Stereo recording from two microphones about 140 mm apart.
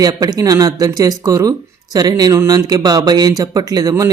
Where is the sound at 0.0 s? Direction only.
25° right (ahead or behind).